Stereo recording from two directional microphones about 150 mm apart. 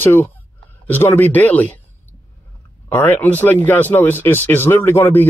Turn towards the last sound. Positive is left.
turn(degrees=15)  # may be behind; listen again after turning